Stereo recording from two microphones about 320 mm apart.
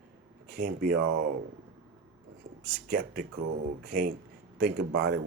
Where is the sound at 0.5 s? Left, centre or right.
Right.